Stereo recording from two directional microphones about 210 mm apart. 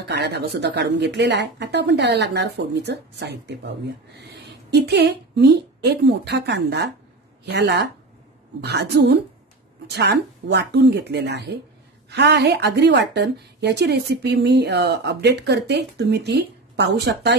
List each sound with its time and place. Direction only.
0.1 s a woman's voice: 50° right (ahead or behind)